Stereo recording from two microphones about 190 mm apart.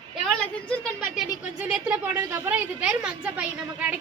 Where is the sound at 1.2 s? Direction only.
5° right (ahead or behind).